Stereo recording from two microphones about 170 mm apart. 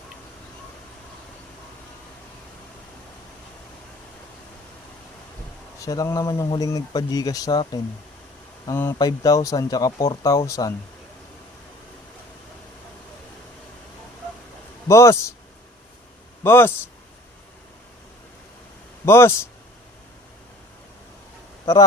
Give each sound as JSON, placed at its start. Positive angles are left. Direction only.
{"t": 5.8, "sound": "speech", "side_deg": 20}
{"t": 8.6, "sound": "speech", "side_deg": 15}
{"t": 14.8, "sound": "speech", "side_deg": 15}
{"t": 16.4, "sound": "speech", "side_deg": 15}
{"t": 19.0, "sound": "speech", "side_deg": 15}